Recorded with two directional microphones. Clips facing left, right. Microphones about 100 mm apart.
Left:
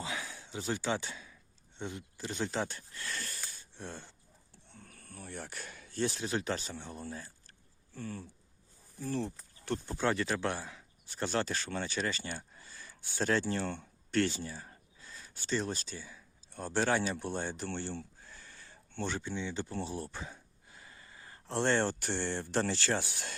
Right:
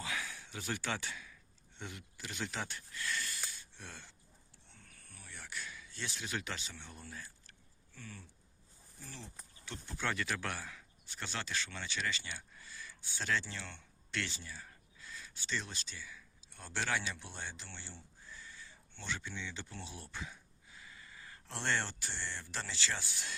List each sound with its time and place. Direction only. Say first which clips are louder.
0.0 s a sound: left 2 dB; 25° left (ahead or behind)
1.8 s speech: left 7 dB; 30° left (ahead or behind)
9.0 s speech: left 17 dB; 55° left (ahead or behind)
9.8 s speech: left 5 dB; 35° left (ahead or behind)
11.1 s speech: left 8 dB; 40° left (ahead or behind)
14.6 s a sound: left 2 dB; 35° left (ahead or behind)
15.4 s speech: left 8 dB; 40° left (ahead or behind)
21.9 s speech: left 9 dB; 55° left (ahead or behind)